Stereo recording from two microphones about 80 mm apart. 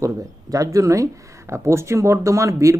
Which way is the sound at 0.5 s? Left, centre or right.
Right.